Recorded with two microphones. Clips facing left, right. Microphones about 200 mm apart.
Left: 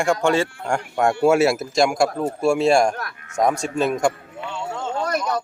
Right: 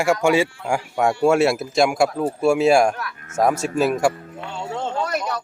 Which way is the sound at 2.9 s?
45° left (ahead or behind).